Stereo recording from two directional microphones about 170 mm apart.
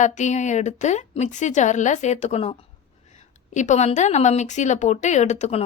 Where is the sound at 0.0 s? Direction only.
45° left (ahead or behind).